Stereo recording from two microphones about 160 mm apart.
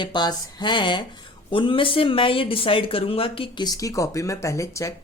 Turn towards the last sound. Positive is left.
turn(degrees=20)  # may be behind; listen again after turning